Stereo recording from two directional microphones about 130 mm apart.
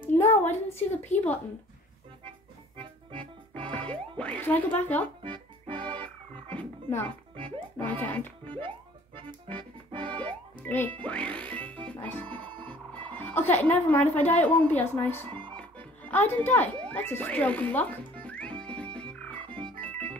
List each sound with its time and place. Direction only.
0.1 s a sound: 15° left (ahead or behind)
0.7 s a woman's voice: 15° left (ahead or behind)
2.8 s music: 40° right (ahead or behind)
3.9 s speech: 10° left (ahead or behind)
5.2 s music: 40° right (ahead or behind)
6.0 s frog: 10° left (ahead or behind)
8.0 s music: 15° left (ahead or behind)
9.1 s music: 40° right (ahead or behind)
10.2 s music: 15° left (ahead or behind)
12.6 s speech: 10° left (ahead or behind)
15.5 s music: 10° left (ahead or behind)
18.9 s frog: 10° left (ahead or behind)
19.8 s organ: 10° left (ahead or behind)